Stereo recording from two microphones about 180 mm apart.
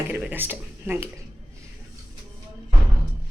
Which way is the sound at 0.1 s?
10° right (ahead or behind).